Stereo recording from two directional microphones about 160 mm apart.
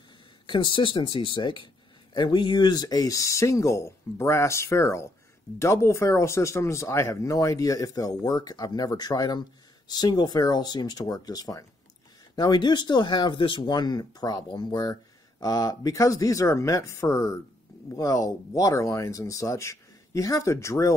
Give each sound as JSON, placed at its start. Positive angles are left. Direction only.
{"t": 0.5, "sound": "speech", "side_deg": 30}